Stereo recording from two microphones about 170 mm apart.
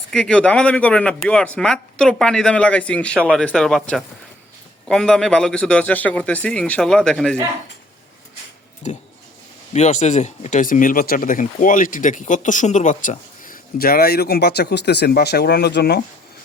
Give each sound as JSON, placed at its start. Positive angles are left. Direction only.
{"t": 0.1, "sound": "a man's voice", "side_deg": 5}
{"t": 8.8, "sound": "speech", "side_deg": 45}